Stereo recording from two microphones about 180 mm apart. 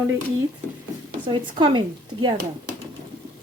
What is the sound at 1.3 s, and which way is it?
Speech, 25° right (ahead or behind).